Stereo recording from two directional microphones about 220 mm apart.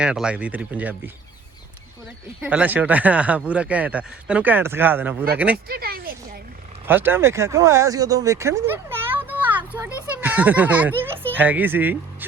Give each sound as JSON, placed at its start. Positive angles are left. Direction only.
{"t": 0.0, "sound": "speech", "side_deg": -5}
{"t": 2.4, "sound": "speech", "side_deg": -5}
{"t": 5.6, "sound": "speech", "side_deg": -45}
{"t": 6.8, "sound": "speech", "side_deg": -10}